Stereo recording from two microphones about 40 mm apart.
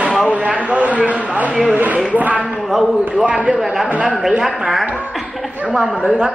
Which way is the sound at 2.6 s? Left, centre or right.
Centre.